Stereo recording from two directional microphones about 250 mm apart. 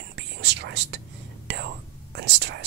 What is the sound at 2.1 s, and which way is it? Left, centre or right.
Whispering, right.